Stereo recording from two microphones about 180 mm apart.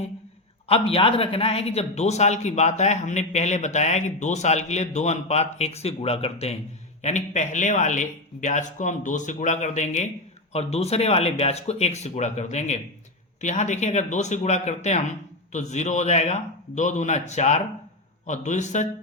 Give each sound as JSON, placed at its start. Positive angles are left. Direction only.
{"t": 0.7, "sound": "a man's voice", "side_deg": 30}